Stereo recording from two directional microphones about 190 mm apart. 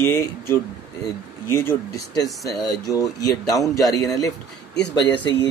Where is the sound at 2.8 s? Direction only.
20° left (ahead or behind).